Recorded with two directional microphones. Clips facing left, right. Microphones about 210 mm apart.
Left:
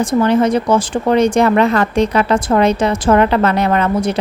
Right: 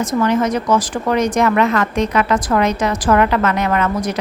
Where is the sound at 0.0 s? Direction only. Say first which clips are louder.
Left 3 dB; 30° left (ahead or behind).